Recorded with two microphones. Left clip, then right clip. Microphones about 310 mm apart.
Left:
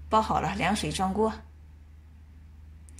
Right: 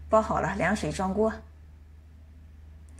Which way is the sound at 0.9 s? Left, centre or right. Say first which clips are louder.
Even; centre.